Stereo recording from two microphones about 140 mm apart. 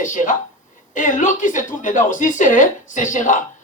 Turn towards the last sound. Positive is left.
turn(degrees=65)  # may be behind; listen again after turning